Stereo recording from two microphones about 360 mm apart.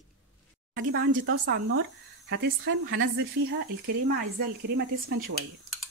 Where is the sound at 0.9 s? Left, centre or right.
Right.